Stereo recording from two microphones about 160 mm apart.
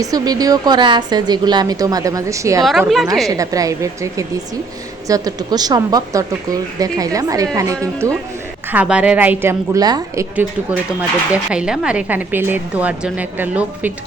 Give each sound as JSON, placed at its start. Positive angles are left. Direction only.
{"t": 0.0, "sound": "speech", "side_deg": -25}
{"t": 2.6, "sound": "a woman's voice", "side_deg": 0}
{"t": 3.2, "sound": "speech", "side_deg": -20}
{"t": 8.7, "sound": "a woman's voice", "side_deg": -10}
{"t": 11.3, "sound": "a woman's voice", "side_deg": -5}